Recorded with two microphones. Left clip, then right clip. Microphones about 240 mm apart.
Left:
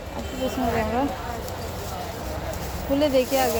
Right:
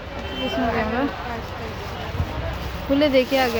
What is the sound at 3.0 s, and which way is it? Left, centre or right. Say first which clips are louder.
Speech: right 3 dB; right.